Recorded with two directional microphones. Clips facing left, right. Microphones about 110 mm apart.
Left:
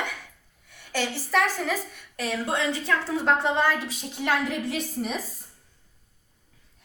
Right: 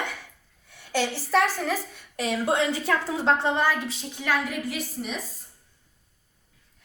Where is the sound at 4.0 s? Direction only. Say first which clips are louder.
Left 1 dB; 20° left (ahead or behind).